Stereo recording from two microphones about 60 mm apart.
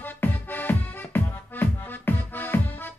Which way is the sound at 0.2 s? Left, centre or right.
Left.